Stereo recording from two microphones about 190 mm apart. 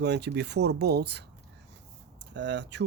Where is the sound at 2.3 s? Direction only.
65° right (ahead or behind).